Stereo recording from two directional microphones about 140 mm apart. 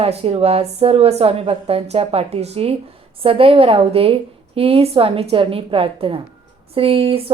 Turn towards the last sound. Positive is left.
turn(degrees=-40)  # may be behind; listen again after turning